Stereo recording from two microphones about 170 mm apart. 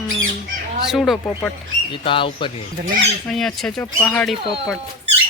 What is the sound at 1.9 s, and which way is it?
Speech, 30° left (ahead or behind).